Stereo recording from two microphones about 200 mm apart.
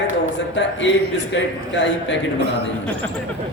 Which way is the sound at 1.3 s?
65° left (ahead or behind).